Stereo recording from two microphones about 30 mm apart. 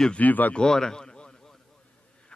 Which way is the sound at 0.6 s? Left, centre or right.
Centre.